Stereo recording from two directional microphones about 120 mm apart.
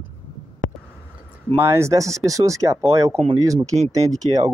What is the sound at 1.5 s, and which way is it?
Speech, 25° right (ahead or behind).